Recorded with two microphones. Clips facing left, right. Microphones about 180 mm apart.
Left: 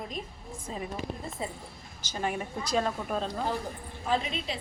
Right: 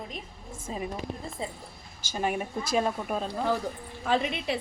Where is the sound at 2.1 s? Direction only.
10° right (ahead or behind).